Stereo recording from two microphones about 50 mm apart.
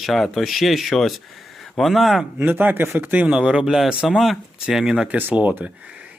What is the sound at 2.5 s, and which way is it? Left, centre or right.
Speech, right.